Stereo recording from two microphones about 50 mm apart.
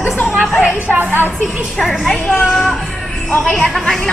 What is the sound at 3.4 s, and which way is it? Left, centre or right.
Speech, centre.